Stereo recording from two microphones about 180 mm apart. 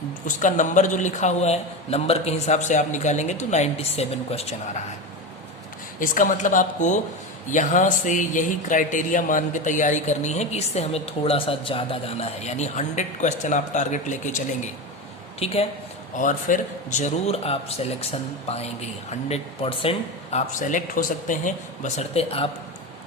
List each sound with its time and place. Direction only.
0.3 s a man's voice: 45° left (ahead or behind)
6.0 s speech: 50° left (ahead or behind)
15.4 s a man's voice: 35° left (ahead or behind)
16.1 s a man's voice: 45° left (ahead or behind)
20.5 s speech: 45° left (ahead or behind)